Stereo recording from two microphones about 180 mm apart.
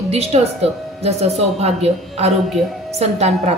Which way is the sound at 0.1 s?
35° right (ahead or behind).